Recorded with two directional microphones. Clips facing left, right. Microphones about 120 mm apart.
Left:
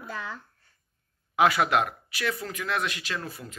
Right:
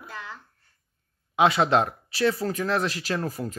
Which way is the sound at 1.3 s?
25° right (ahead or behind).